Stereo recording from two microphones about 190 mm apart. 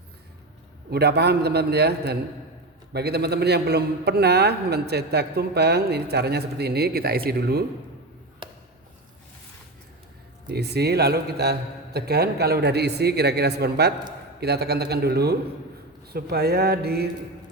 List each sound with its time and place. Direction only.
0.9 s a man's voice: 60° right (ahead or behind)
10.5 s a man's voice: 60° right (ahead or behind)